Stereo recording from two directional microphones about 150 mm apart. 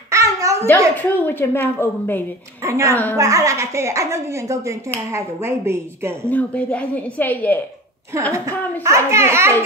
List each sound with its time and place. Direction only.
0.1 s babbling: 20° right (ahead or behind)
0.9 s a woman's voice: 10° left (ahead or behind)
2.6 s a woman's voice: 20° right (ahead or behind)
6.2 s a woman's voice: 10° left (ahead or behind)
8.1 s a woman's voice: 20° right (ahead or behind)